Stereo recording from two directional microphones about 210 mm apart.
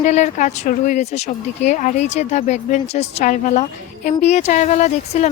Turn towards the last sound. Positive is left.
turn(degrees=35)  # may be behind; listen again after turning